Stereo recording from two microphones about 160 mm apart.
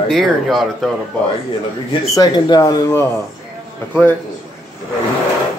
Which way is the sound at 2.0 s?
20° left (ahead or behind).